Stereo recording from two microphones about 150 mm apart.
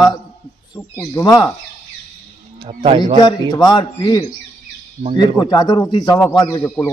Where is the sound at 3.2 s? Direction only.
30° left (ahead or behind).